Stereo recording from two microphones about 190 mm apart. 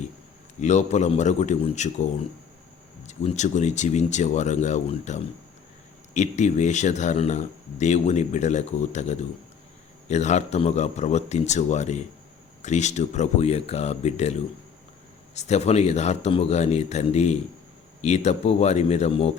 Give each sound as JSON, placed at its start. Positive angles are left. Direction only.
{"t": 0.6, "sound": "speech", "side_deg": 40}
{"t": 3.1, "sound": "speech", "side_deg": 40}